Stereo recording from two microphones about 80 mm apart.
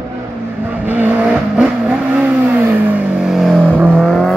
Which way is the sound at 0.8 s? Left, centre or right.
Right.